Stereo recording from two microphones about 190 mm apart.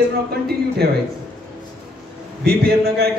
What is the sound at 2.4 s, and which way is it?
Speech, 55° right (ahead or behind).